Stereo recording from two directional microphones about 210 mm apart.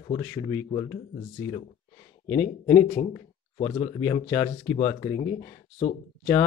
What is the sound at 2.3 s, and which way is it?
Speech, 10° left (ahead or behind).